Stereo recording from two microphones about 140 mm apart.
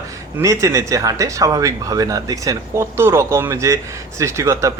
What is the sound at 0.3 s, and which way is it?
Speech, 20° right (ahead or behind).